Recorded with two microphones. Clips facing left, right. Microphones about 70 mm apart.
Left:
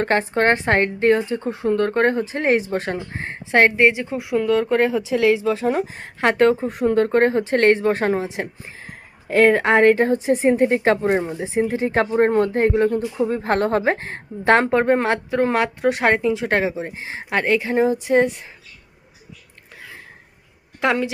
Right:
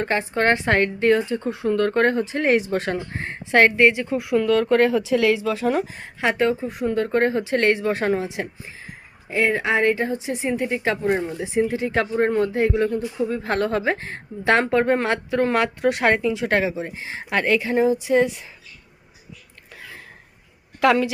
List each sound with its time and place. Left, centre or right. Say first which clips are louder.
0.0 s speech: left 3 dB; left
6.3 s speech: left 7 dB; left
20.8 s speech: right 2 dB; left